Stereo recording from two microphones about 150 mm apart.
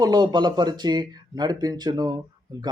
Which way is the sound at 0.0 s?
25° right (ahead or behind).